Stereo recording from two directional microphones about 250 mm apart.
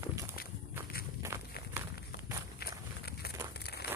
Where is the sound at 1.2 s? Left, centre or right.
Centre.